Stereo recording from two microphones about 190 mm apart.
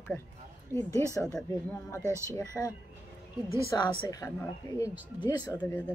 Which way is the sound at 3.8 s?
20° left (ahead or behind).